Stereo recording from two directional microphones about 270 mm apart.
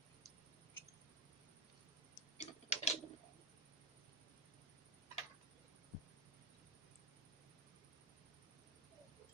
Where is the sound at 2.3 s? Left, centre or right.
Left.